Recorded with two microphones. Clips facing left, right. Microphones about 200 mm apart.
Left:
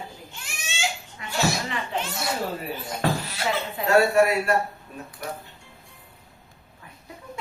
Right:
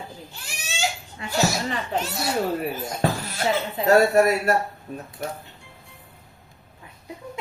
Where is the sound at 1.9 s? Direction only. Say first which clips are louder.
Right 3 dB; 40° right (ahead or behind).